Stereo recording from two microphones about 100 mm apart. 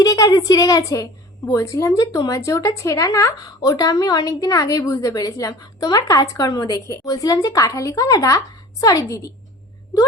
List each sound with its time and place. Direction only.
0.0 s speech: 35° left (ahead or behind)